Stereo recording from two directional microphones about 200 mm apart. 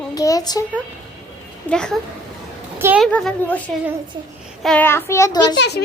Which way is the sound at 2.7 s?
10° right (ahead or behind).